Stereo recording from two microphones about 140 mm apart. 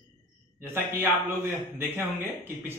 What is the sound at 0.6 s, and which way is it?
A man's voice, 15° right (ahead or behind).